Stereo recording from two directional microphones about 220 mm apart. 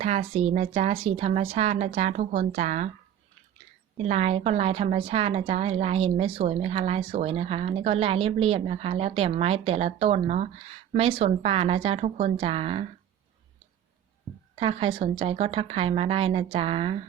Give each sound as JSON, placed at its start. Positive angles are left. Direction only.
{"t": 0.0, "sound": "a woman's voice", "side_deg": -30}
{"t": 3.9, "sound": "a woman's voice", "side_deg": -30}
{"t": 14.5, "sound": "a woman's voice", "side_deg": -25}